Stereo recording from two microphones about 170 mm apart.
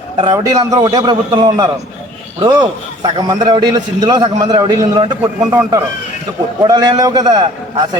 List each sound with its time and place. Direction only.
0.2 s a man's voice: 25° right (ahead or behind)
6.6 s a man's voice: 25° right (ahead or behind)